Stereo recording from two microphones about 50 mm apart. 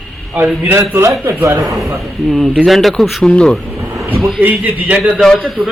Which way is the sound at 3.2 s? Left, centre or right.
Centre.